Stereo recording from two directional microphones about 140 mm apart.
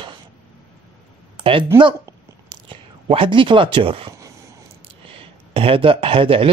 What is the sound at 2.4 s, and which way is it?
Speech, 40° right (ahead or behind).